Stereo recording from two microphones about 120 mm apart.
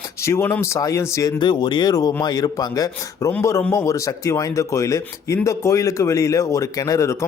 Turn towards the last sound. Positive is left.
turn(degrees=25)  # may be behind; listen again after turning